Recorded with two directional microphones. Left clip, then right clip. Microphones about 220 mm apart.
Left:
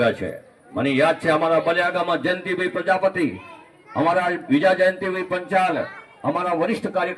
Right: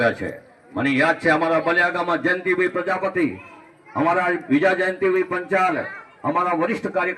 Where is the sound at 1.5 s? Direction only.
50° left (ahead or behind).